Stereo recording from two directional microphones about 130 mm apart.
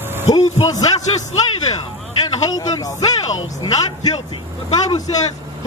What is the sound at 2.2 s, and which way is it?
A man's voice, 30° left (ahead or behind).